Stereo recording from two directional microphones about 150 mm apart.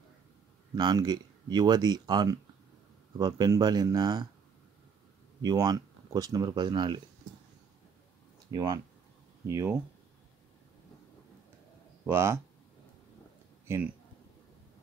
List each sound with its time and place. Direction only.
0.7 s speech: 30° right (ahead or behind)
5.4 s speech: 25° right (ahead or behind)
8.5 s speech: 25° right (ahead or behind)
12.1 s speech: 20° right (ahead or behind)
13.7 s speech: 15° right (ahead or behind)